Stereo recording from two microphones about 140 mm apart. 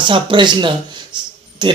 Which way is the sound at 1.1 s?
35° right (ahead or behind).